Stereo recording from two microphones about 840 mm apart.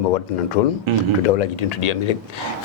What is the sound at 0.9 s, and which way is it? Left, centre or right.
Speech, right.